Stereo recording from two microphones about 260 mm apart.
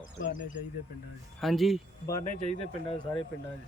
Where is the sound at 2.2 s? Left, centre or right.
Left.